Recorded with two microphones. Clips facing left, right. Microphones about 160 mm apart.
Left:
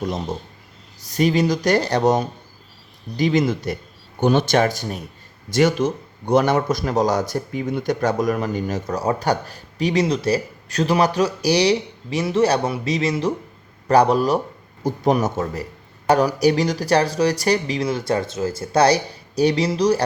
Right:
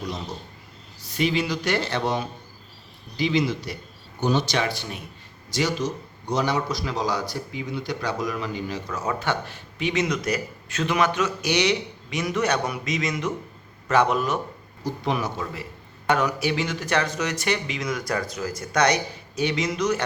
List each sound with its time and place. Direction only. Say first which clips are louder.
1.0 s a man's voice: left 6 dB; 40° left (ahead or behind)
5.5 s a man's voice: left 8 dB; 55° left (ahead or behind); by 14.4 s 35° left (ahead or behind)
14.8 s a man's voice: left 7 dB; 45° left (ahead or behind)